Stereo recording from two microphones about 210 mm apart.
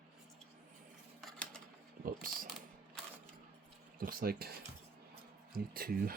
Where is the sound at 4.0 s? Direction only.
45° right (ahead or behind).